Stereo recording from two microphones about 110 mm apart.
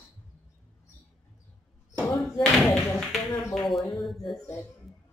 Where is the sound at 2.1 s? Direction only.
Centre (ahead or behind).